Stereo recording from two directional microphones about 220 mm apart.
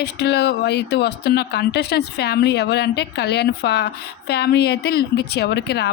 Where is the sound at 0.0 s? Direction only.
50° left (ahead or behind).